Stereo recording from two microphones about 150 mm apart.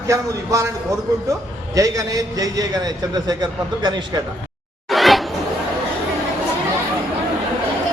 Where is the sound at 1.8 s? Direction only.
25° right (ahead or behind).